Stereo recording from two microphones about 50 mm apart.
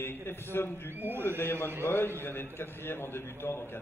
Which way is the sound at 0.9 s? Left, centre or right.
Right.